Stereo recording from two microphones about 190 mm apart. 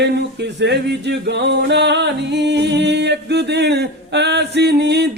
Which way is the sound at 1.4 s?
65° right (ahead or behind).